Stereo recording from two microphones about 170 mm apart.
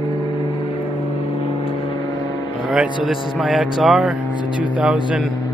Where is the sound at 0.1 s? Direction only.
30° left (ahead or behind).